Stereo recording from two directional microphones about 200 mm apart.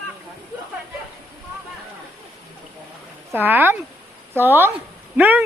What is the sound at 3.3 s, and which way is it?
Speech, 10° right (ahead or behind).